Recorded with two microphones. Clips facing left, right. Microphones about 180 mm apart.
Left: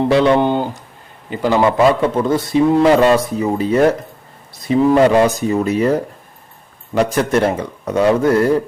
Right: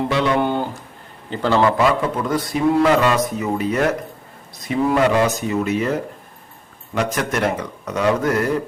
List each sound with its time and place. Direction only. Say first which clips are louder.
0.1 s a man's voice: left 7 dB; 30° left (ahead or behind); by 1.7 s 15° left (ahead or behind)
1.8 s speech: left 5 dB; 30° left (ahead or behind)